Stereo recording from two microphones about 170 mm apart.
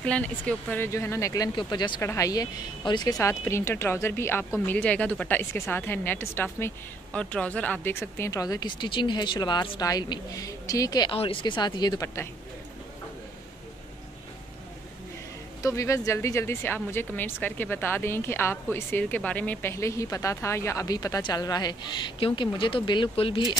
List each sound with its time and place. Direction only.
0.0 s speech: 5° left (ahead or behind)
15.6 s speech: 15° left (ahead or behind)